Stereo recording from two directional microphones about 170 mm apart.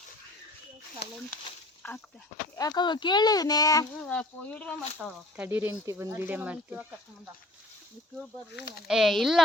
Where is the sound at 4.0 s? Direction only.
5° left (ahead or behind).